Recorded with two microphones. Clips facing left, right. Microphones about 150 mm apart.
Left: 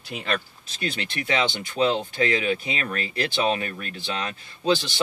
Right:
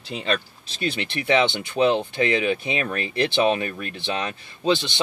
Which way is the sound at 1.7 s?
20° right (ahead or behind).